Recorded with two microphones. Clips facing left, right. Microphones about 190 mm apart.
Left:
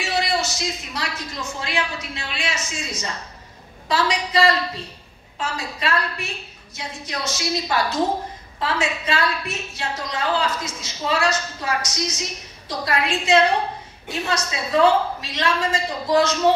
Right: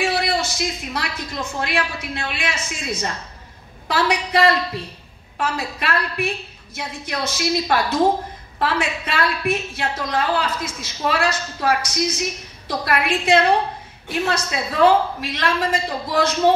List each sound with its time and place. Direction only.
0.0 s a woman's voice: 55° right (ahead or behind)